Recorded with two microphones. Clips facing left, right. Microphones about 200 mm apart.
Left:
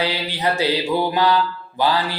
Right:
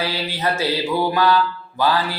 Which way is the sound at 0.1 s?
15° left (ahead or behind).